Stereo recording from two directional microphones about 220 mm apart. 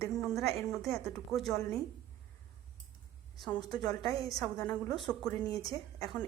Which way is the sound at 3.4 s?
5° left (ahead or behind).